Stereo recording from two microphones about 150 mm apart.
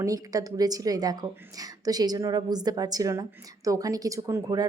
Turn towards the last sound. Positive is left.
turn(degrees=-25)  # may be behind; listen again after turning